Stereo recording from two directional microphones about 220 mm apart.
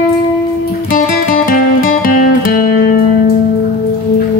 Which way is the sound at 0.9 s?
40° left (ahead or behind).